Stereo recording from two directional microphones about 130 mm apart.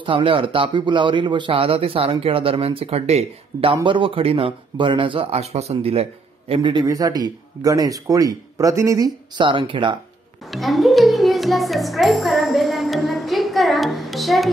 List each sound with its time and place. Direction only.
0.0 s a man's voice: 40° right (ahead or behind)
3.8 s a man's voice: 40° right (ahead or behind)
6.5 s a man's voice: 40° right (ahead or behind)
9.4 s speech: 40° right (ahead or behind)
10.5 s a child's voice: centre (ahead or behind)